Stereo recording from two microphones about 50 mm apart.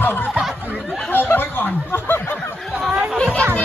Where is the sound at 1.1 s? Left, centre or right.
Left.